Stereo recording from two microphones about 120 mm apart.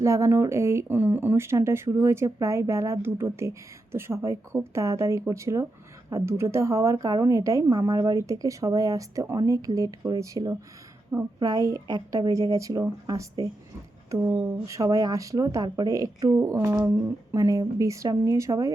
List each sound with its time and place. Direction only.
0.0 s speech: 25° right (ahead or behind)
14.2 s speech: 25° right (ahead or behind)